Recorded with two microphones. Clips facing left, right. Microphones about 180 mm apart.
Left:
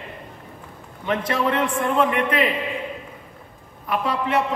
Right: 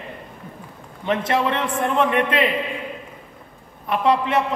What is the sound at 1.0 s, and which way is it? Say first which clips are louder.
A man's voice: right 2 dB; 25° right (ahead or behind).